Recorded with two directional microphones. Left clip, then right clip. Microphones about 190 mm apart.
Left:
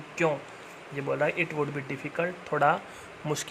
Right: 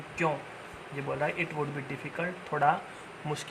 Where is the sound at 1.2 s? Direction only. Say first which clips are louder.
Left 4 dB; 40° left (ahead or behind).